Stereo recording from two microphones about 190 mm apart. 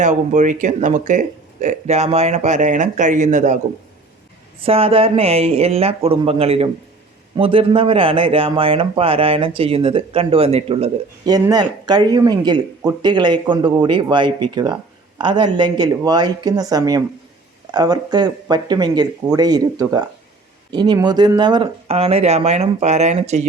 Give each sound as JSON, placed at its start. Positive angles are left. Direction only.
{"t": 0.0, "sound": "speech", "side_deg": -40}
{"t": 4.6, "sound": "speech", "side_deg": -30}
{"t": 11.3, "sound": "speech", "side_deg": -20}